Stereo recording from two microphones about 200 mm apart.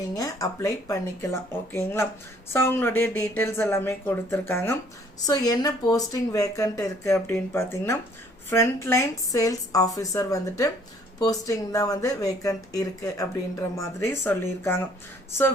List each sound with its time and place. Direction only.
0.1 s a woman's voice: 15° left (ahead or behind)